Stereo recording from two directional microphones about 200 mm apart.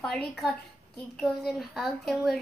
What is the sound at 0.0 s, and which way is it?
A woman's voice, centre (ahead or behind).